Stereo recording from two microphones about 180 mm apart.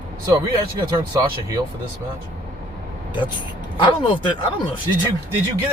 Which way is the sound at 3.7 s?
25° left (ahead or behind).